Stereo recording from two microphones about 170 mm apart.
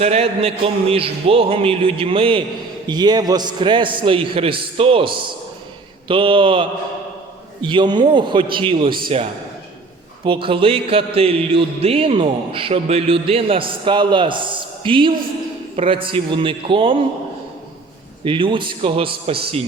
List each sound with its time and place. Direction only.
0.0 s music: 35° right (ahead or behind)
2.8 s a man's voice: 25° right (ahead or behind)
6.1 s music: 30° right (ahead or behind)
7.6 s a man's voice: 25° right (ahead or behind)
9.0 s music: 35° right (ahead or behind)
18.3 s a man's voice: 30° right (ahead or behind)